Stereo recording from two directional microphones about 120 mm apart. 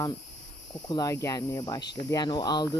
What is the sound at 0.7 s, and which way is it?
Cricket, 35° left (ahead or behind).